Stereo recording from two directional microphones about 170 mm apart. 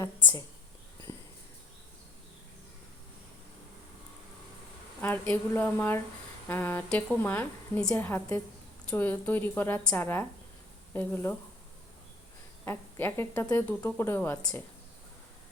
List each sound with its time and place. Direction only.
0.0 s a sound: 20° left (ahead or behind)
4.9 s speech: 10° left (ahead or behind)
12.6 s speech: 15° left (ahead or behind)